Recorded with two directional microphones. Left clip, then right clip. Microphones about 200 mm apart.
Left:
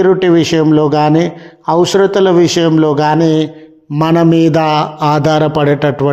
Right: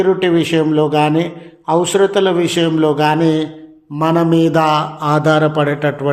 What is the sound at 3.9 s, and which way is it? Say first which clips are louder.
A man's voice: left 3 dB; 40° left (ahead or behind).